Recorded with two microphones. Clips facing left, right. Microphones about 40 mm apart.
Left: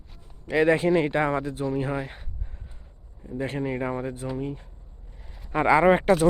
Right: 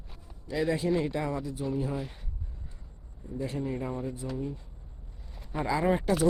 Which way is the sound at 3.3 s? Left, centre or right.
Left.